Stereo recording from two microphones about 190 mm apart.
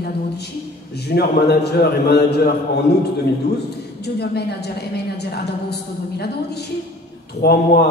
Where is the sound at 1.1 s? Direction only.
55° left (ahead or behind).